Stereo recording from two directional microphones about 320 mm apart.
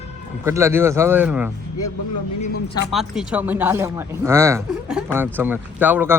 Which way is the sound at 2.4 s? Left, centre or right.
Left.